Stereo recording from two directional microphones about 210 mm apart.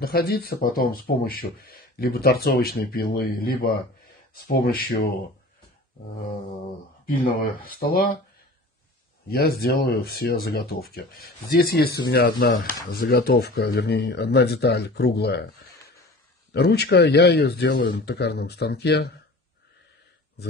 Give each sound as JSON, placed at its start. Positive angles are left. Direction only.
{"t": 0.0, "sound": "speech", "side_deg": 45}
{"t": 7.6, "sound": "speech", "side_deg": 45}
{"t": 9.3, "sound": "speech", "side_deg": 50}
{"t": 16.5, "sound": "speech", "side_deg": 50}